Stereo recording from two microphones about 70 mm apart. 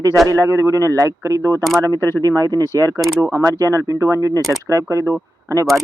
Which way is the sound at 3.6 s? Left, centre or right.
Right.